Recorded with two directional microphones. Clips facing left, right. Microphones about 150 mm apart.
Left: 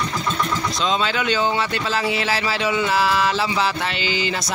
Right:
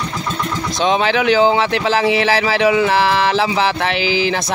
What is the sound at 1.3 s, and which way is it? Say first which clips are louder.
Speech: right 10 dB; 90° right.